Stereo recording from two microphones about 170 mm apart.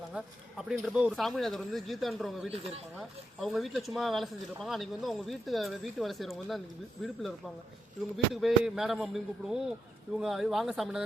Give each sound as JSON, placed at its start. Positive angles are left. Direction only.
{"t": 0.1, "sound": "speech", "side_deg": -5}
{"t": 2.5, "sound": "speech", "side_deg": -35}
{"t": 3.4, "sound": "speech", "side_deg": 0}